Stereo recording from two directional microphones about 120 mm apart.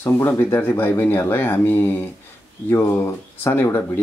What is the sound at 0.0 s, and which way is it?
Speech, 20° left (ahead or behind).